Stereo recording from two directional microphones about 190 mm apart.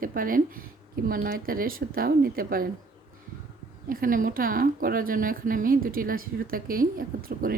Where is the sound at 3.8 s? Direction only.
50° right (ahead or behind).